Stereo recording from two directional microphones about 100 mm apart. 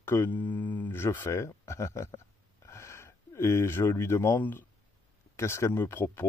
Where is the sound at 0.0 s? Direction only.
25° left (ahead or behind).